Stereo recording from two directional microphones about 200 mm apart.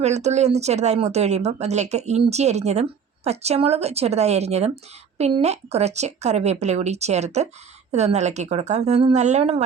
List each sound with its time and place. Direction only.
0.0 s speech: 35° right (ahead or behind)